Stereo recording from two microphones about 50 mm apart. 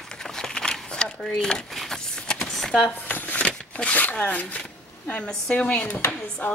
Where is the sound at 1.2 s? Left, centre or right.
Centre.